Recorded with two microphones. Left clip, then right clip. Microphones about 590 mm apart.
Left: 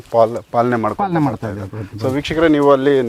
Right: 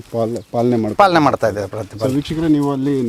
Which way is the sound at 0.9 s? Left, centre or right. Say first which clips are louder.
Right 7 dB; right.